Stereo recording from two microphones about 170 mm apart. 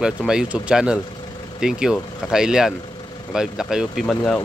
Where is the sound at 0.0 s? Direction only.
5° right (ahead or behind).